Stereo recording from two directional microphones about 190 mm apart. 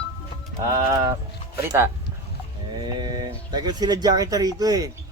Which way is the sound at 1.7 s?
15° right (ahead or behind).